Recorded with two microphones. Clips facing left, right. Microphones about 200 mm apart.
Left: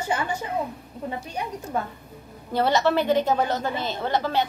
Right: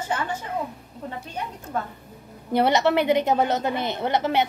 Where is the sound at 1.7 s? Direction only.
10° left (ahead or behind).